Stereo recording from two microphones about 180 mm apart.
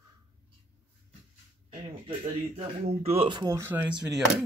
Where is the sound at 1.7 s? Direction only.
30° right (ahead or behind); by 3.8 s 15° right (ahead or behind).